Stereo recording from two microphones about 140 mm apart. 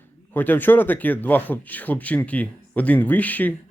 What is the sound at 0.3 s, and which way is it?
Speech, 15° left (ahead or behind).